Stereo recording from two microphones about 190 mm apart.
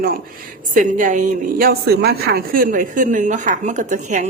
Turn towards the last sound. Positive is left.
turn(degrees=-40)  # may be behind; listen again after turning